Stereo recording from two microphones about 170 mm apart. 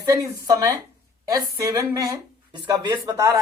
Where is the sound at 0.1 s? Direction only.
20° right (ahead or behind).